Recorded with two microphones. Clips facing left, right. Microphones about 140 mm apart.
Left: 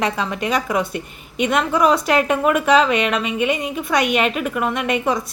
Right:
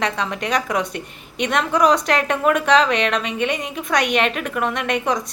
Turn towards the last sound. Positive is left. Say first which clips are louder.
# left 1 dB
turn(degrees=5)  # may be behind; listen again after turning